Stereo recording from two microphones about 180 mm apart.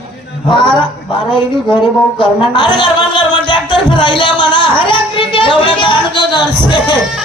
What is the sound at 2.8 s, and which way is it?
Music, 25° left (ahead or behind).